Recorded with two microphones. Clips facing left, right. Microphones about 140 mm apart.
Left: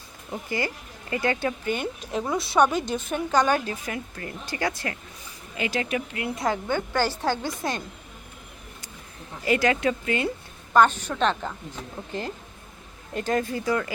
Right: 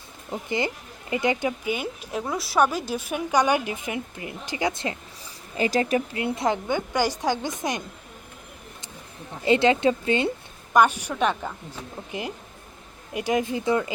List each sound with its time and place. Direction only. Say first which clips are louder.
0.3 s speech: right 2 dB; 20° right (ahead or behind)
5.5 s speech: right 5 dB; 35° right (ahead or behind)
6.1 s speech: right 2 dB; 25° right (ahead or behind)
9.4 s speech: right 3 dB; 25° right (ahead or behind)
10.8 s speech: even; 10° right (ahead or behind)